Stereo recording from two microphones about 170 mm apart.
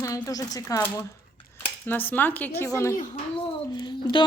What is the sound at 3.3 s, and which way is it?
Speech, 30° left (ahead or behind).